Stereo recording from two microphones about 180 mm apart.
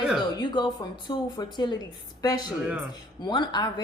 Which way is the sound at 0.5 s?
25° left (ahead or behind).